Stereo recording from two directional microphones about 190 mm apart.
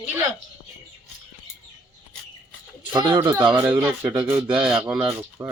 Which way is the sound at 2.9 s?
25° right (ahead or behind).